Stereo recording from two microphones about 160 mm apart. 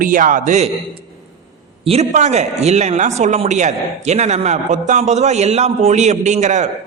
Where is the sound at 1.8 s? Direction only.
45° right (ahead or behind).